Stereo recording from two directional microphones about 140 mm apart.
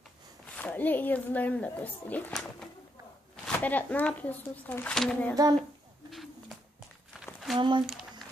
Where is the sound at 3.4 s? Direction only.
10° left (ahead or behind).